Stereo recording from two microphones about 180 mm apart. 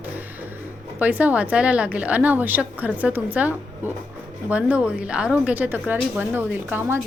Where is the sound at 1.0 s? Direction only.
10° right (ahead or behind).